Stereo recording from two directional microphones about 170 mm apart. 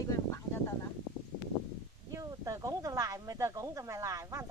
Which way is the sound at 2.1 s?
20° right (ahead or behind).